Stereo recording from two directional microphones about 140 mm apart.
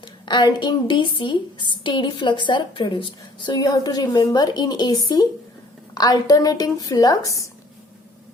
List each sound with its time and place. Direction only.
0.0 s a woman's voice: 30° left (ahead or behind)